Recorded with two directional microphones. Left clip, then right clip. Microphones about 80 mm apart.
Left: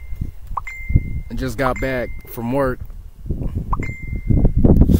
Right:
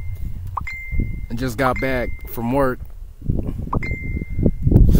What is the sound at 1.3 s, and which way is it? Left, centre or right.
Speech, right.